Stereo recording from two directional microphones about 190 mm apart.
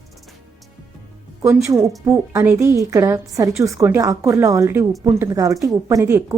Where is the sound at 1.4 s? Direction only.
15° right (ahead or behind).